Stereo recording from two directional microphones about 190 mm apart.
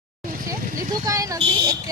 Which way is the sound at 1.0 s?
15° right (ahead or behind).